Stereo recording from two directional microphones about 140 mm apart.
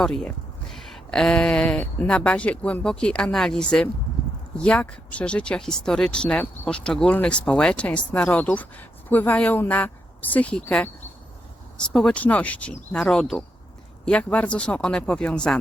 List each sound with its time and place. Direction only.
0.0 s speech: 5° left (ahead or behind)